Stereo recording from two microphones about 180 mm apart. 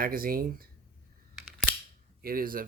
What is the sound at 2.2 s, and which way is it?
Speech, 55° right (ahead or behind).